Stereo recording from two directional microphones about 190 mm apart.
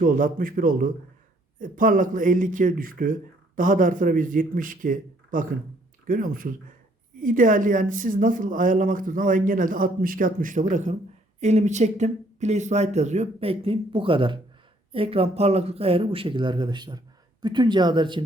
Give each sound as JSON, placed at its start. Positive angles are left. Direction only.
{"t": 0.0, "sound": "speech", "side_deg": -45}